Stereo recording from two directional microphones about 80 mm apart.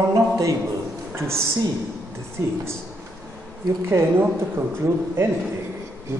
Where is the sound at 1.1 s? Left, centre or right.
Right.